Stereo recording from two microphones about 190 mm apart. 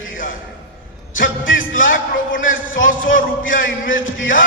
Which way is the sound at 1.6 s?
45° left (ahead or behind).